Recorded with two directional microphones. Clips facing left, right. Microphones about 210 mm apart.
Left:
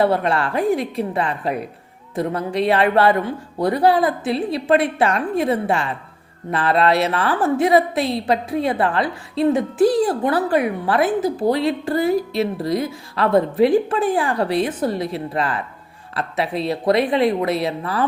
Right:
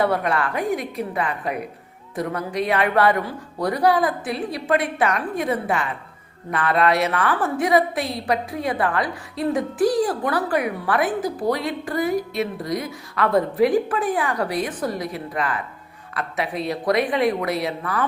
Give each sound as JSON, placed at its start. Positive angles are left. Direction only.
{"t": 0.0, "sound": "a woman's voice", "side_deg": 25}